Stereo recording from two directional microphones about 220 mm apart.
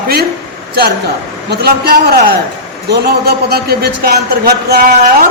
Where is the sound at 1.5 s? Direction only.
45° right (ahead or behind).